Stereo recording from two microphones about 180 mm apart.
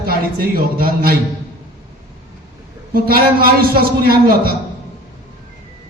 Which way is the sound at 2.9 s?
55° right (ahead or behind).